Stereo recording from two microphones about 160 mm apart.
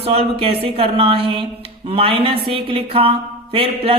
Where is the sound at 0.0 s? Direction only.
40° right (ahead or behind).